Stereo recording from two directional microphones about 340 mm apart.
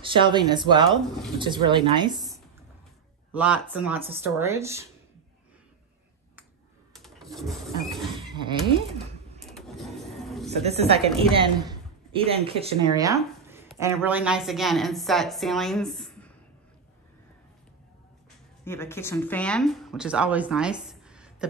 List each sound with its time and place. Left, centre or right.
0.0 s speech: centre
6.9 s vehicle: centre
7.3 s printer: centre
7.9 s a sound: centre
9.4 s vehicle: centre
10.5 s speech: centre
18.6 s speech: centre